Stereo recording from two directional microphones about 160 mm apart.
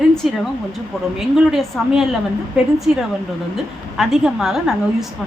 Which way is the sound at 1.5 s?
Centre (ahead or behind).